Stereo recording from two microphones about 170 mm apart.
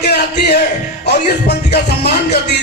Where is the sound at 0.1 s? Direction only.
70° left (ahead or behind).